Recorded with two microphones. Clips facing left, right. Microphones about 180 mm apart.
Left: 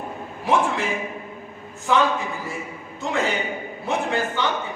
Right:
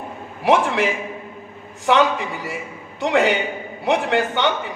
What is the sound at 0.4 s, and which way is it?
Speech, 80° right.